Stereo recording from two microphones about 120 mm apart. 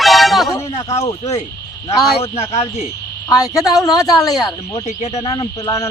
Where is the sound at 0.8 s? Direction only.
65° left (ahead or behind).